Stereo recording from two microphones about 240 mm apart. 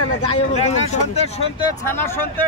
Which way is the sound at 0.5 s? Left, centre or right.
Left.